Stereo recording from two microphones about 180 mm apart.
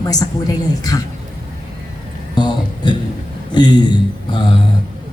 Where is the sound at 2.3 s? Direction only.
25° left (ahead or behind).